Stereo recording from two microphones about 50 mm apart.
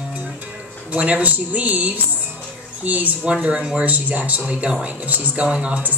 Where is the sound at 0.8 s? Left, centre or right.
Right.